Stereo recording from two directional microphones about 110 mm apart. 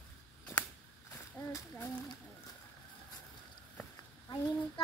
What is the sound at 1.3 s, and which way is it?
Speech, 20° left (ahead or behind).